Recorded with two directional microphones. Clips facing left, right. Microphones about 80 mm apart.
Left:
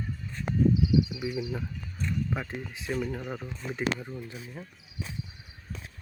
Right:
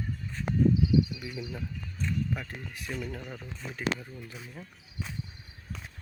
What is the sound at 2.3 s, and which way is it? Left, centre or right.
Speech, centre.